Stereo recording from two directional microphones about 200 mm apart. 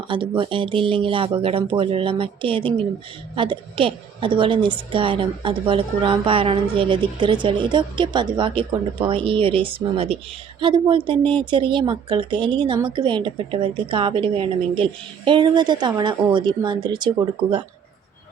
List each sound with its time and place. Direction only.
0.1 s speech: 25° right (ahead or behind)